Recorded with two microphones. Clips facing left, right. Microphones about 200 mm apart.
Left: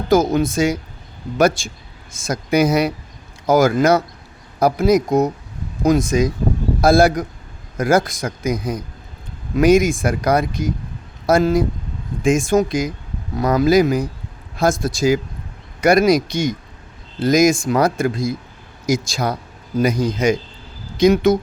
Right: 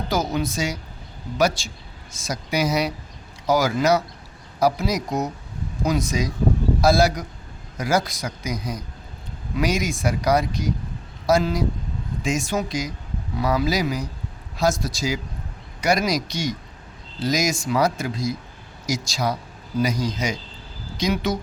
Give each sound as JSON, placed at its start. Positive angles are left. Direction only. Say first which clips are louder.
{"t": 0.1, "sound": "a man's voice", "louder": "left 10 dB", "side_deg": 50}